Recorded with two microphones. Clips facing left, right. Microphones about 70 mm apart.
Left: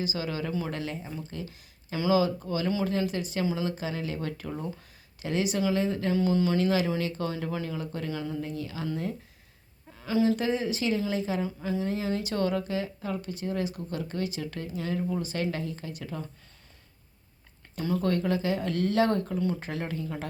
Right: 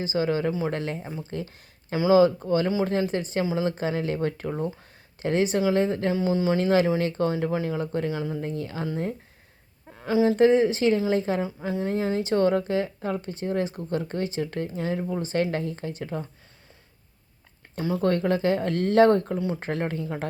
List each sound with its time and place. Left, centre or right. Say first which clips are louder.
0.0 s speech: right 7 dB; right
6.1 s speech: even; right
6.6 s speech: right 5 dB; right
8.1 s speech: right 4 dB; right
8.4 s speech: right 4 dB; right
9.9 s a sound: right 6 dB; right
10.2 s speech: right 12 dB; right
18.0 s speech: right 6 dB; right